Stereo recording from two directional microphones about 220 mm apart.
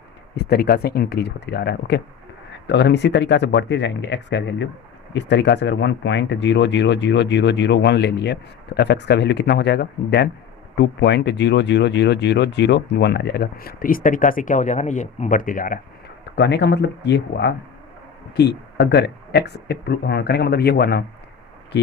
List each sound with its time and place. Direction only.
0.3 s speech: 45° left (ahead or behind)
16.3 s speech: 50° left (ahead or behind)